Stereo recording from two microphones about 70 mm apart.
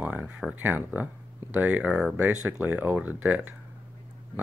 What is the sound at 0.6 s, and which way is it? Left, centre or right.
Speech, right.